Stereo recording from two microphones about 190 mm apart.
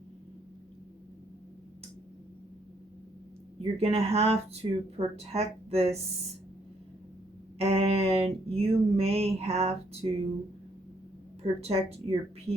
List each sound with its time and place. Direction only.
3.6 s speech: 30° right (ahead or behind)
7.6 s a sound: 30° right (ahead or behind)
11.6 s speech: 30° right (ahead or behind)